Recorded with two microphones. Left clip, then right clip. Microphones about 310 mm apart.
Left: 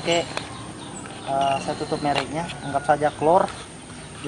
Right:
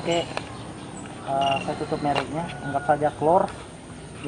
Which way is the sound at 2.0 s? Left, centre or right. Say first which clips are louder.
Left 1 dB; centre.